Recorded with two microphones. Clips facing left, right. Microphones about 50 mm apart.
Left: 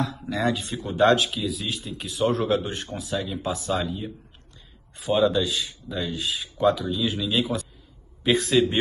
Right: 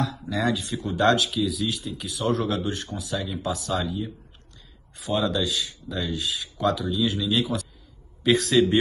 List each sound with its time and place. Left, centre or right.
0.0 s speech: left
5.0 s speech: left